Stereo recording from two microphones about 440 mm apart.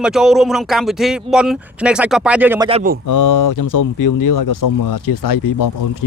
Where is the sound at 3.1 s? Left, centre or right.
Left.